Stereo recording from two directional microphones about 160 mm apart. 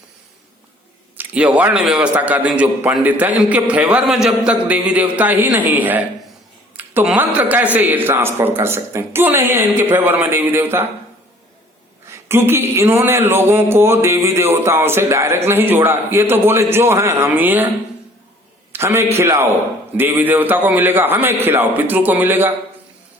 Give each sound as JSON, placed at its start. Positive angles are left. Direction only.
{"t": 1.1, "sound": "speech", "side_deg": -10}
{"t": 12.0, "sound": "speech", "side_deg": -15}
{"t": 18.7, "sound": "a man's voice", "side_deg": -15}